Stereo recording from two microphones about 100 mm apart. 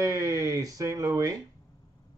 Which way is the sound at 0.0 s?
35° right (ahead or behind).